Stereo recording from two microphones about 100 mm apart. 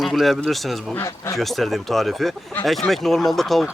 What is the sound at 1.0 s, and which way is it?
Speech, 30° left (ahead or behind).